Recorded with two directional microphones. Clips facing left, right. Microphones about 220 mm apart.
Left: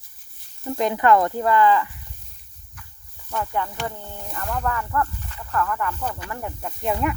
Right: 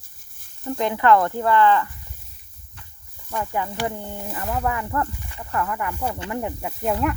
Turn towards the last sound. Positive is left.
turn(degrees=0)  # may be behind; listen again after turning